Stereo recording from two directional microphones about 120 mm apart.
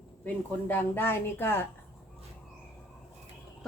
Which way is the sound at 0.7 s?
20° left (ahead or behind).